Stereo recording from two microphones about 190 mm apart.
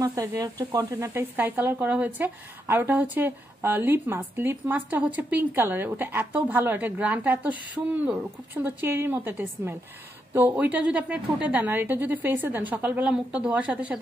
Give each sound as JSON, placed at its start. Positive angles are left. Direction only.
{"t": 0.0, "sound": "speech", "side_deg": -15}